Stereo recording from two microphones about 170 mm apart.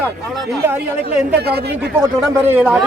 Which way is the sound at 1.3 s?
70° right (ahead or behind).